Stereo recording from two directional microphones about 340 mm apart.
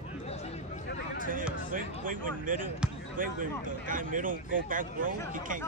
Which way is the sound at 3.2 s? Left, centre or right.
Right.